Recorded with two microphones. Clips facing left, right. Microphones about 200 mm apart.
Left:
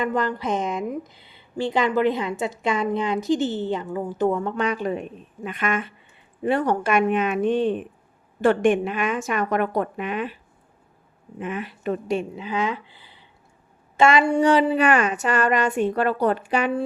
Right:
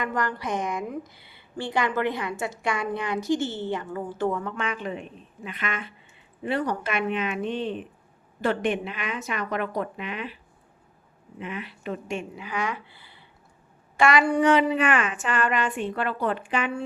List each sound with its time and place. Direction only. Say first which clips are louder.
0.0 s a woman's voice: left 5 dB; 20° left (ahead or behind)
4.4 s a woman's voice: left 6 dB; 30° left (ahead or behind); by 10.3 s 45° left (ahead or behind)
11.3 s a woman's voice: left 5 dB; 50° left (ahead or behind)
12.5 s a woman's voice: left 3 dB; 20° left (ahead or behind); by 16.8 s 40° left (ahead or behind)